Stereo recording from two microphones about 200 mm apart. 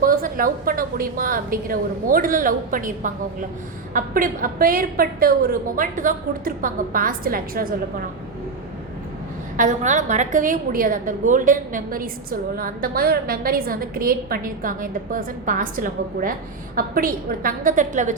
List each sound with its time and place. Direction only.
0.0 s a woman's voice: 45° right (ahead or behind)
9.6 s a woman's voice: 40° right (ahead or behind)